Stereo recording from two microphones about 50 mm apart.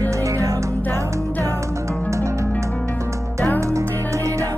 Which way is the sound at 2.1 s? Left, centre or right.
Right.